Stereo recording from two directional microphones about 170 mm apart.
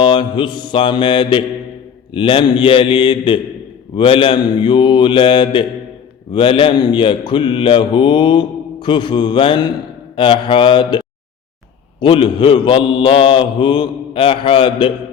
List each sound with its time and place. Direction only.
0.0 s mantra: 30° left (ahead or behind)